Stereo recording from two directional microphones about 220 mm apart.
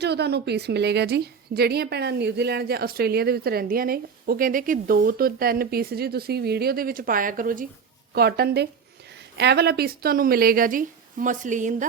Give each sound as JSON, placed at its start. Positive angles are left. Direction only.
{"t": 0.0, "sound": "a woman's voice", "side_deg": -50}